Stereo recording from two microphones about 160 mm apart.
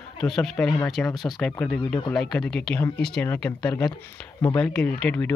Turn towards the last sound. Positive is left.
turn(degrees=5)  # may be behind; listen again after turning